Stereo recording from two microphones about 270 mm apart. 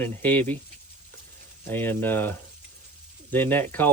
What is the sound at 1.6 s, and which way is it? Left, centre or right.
Speech, centre.